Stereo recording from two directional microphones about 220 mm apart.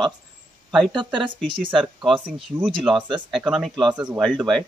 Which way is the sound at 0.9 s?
20° right (ahead or behind).